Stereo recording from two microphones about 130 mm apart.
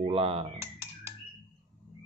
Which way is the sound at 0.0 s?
50° right (ahead or behind).